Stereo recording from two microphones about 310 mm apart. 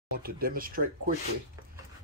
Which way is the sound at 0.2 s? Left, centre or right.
Right.